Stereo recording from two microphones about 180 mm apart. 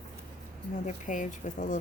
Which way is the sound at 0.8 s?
45° left (ahead or behind).